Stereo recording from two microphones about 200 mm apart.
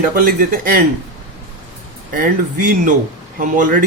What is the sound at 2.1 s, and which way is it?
Speech, 40° right (ahead or behind).